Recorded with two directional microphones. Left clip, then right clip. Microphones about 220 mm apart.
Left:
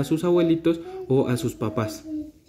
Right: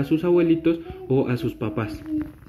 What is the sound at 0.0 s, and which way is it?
Speech, 20° left (ahead or behind).